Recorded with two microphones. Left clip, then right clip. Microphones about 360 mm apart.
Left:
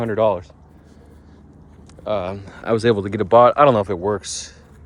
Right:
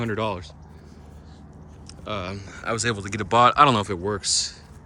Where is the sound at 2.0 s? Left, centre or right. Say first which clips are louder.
Left 8 dB; centre.